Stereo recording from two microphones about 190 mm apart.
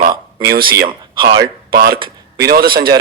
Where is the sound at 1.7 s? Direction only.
50° right (ahead or behind).